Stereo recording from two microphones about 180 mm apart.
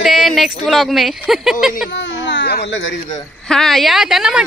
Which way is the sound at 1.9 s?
90° left.